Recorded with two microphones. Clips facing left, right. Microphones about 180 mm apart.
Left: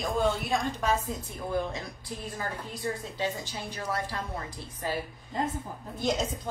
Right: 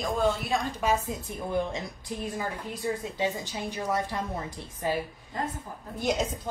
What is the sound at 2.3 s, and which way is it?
A woman's voice, 15° right (ahead or behind).